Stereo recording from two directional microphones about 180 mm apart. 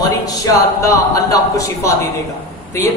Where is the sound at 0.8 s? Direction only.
20° left (ahead or behind).